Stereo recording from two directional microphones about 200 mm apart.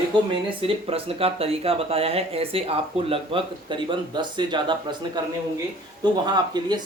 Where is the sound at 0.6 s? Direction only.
30° right (ahead or behind).